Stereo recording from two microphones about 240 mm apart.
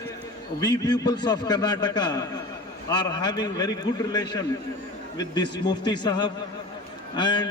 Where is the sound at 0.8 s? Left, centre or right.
Centre.